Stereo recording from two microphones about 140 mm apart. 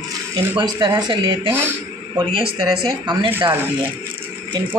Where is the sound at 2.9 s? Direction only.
35° right (ahead or behind).